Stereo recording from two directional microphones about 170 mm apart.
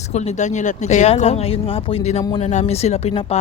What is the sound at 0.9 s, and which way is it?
Speech, 40° left (ahead or behind).